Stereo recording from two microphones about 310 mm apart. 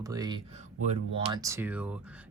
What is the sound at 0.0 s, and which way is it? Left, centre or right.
A man's voice, centre.